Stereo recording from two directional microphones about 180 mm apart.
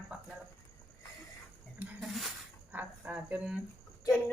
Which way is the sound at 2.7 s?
10° right (ahead or behind).